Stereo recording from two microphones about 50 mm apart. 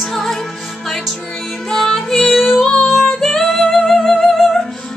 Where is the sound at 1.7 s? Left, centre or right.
Centre.